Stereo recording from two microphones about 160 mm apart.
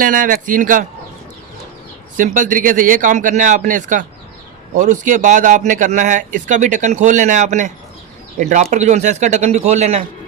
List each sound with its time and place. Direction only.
0.0 s speech: 60° right (ahead or behind)
2.1 s speech: 55° right (ahead or behind)